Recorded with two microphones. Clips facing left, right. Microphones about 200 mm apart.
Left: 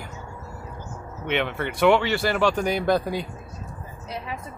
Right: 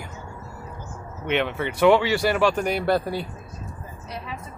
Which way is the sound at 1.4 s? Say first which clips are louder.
Right 1 dB; 5° right (ahead or behind).